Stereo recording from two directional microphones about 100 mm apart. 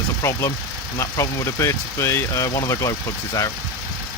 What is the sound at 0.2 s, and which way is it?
Speech, 30° left (ahead or behind).